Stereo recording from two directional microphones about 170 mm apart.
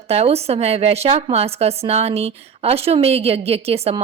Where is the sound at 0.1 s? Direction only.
35° right (ahead or behind).